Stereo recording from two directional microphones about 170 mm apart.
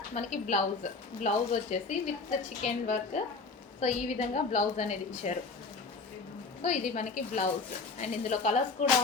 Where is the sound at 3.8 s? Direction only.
45° left (ahead or behind).